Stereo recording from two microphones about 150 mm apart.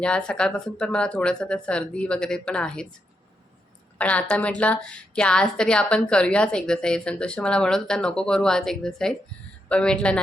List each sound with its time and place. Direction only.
0.0 s a woman's voice: 5° left (ahead or behind)
3.9 s a woman's voice: 10° left (ahead or behind)